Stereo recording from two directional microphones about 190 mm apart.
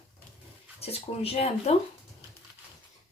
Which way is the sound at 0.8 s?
30° left (ahead or behind).